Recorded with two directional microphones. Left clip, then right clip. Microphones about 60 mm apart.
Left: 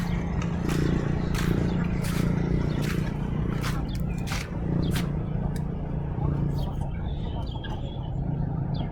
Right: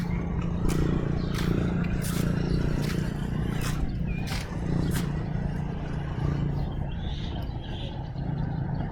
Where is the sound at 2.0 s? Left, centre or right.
Right.